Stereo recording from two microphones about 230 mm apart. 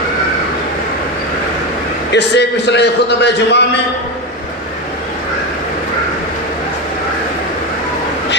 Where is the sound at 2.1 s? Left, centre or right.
Left.